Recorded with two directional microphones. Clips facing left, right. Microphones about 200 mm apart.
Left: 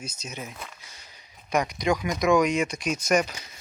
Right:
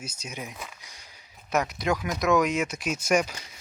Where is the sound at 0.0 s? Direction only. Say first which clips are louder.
Even; 10° right (ahead or behind).